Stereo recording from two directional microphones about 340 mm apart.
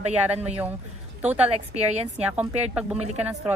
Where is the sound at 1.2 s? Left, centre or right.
Centre.